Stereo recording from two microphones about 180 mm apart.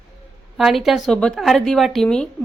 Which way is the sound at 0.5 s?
Centre (ahead or behind).